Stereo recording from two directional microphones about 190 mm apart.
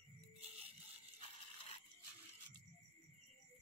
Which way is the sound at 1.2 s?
30° left (ahead or behind).